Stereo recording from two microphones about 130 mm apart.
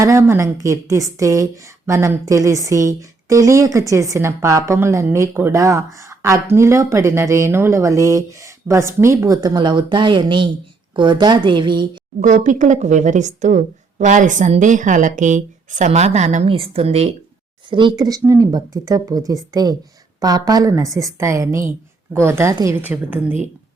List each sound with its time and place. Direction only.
0.0 s a woman's voice: 20° right (ahead or behind)
12.2 s a woman's voice: 70° right (ahead or behind)
16.5 s a woman's voice: 45° right (ahead or behind)
17.7 s a woman's voice: 40° right (ahead or behind); by 23.4 s 15° right (ahead or behind)